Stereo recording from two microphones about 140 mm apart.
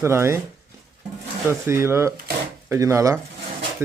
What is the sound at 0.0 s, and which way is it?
Speech, 20° right (ahead or behind).